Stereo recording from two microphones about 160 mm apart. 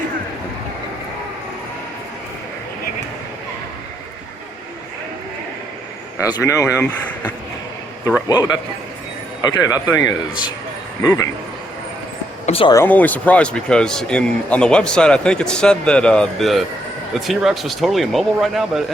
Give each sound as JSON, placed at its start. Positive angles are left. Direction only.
{"t": 6.3, "sound": "speech", "side_deg": 20}
{"t": 8.3, "sound": "speech", "side_deg": 25}
{"t": 12.5, "sound": "speech", "side_deg": 35}
{"t": 12.7, "sound": "speech", "side_deg": 10}